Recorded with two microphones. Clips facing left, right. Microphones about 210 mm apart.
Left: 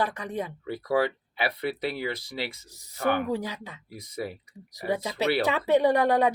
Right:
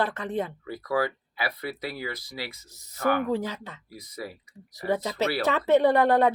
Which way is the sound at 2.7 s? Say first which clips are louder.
Right 1 dB; 15° left (ahead or behind).